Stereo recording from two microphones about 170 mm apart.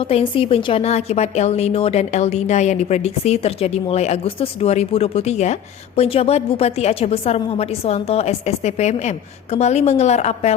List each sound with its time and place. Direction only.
0.0 s a woman's voice: 35° left (ahead or behind)